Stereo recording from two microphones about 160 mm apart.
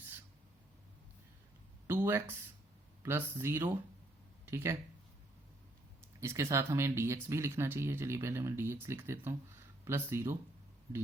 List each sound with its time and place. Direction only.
1.9 s a sound: 15° right (ahead or behind)
3.0 s speech: 15° right (ahead or behind)
6.1 s speech: 20° right (ahead or behind)